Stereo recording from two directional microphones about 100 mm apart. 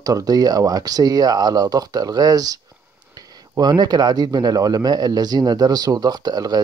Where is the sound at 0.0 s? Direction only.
40° right (ahead or behind).